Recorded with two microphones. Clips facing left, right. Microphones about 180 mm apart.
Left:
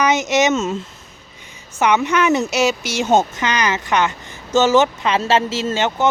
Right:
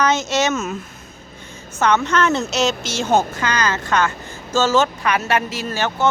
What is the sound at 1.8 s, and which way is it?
Speech, 15° left (ahead or behind).